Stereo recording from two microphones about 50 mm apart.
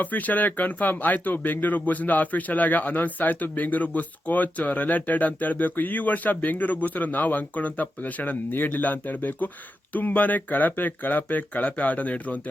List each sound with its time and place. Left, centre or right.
0.0 s speech: left